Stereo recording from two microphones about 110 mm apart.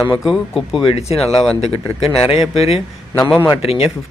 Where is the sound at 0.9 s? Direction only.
70° left (ahead or behind).